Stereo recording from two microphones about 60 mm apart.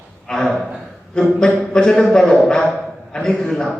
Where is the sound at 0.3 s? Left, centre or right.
Centre.